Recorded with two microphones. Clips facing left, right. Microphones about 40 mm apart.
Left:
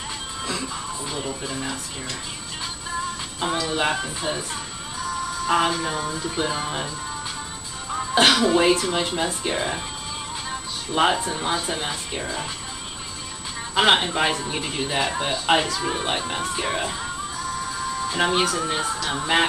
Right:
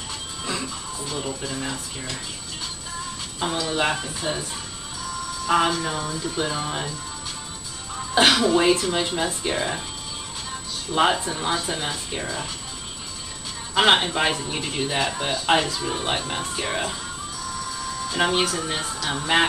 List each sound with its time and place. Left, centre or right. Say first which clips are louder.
1.3 s speech: even; centre
1.6 s speech: even; centre
3.3 s speech: even; centre
5.5 s speech: right 1 dB; centre
8.1 s speech: even; centre
10.9 s speech: even; centre
13.7 s speech: even; centre
17.6 s music: left 3 dB; centre
18.2 s speech: even; centre